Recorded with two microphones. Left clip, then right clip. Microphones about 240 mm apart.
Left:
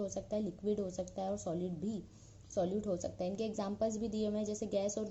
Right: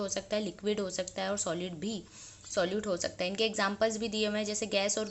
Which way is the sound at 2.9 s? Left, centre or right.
Centre.